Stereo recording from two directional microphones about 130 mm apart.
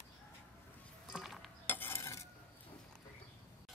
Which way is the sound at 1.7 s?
15° left (ahead or behind).